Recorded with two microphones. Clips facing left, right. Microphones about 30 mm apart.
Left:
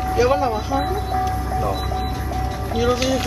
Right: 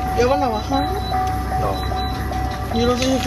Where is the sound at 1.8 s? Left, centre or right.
Right.